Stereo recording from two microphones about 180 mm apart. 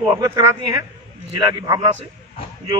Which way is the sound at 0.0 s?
25° right (ahead or behind).